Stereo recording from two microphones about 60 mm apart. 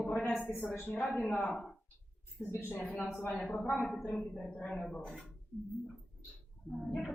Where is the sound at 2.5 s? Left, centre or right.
Left.